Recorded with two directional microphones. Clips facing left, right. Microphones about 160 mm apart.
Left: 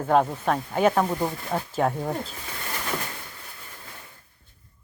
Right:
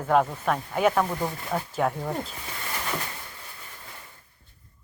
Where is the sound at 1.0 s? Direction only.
20° left (ahead or behind).